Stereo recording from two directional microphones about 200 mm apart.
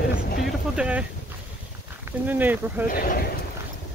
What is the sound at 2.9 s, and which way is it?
Speech, 45° left (ahead or behind).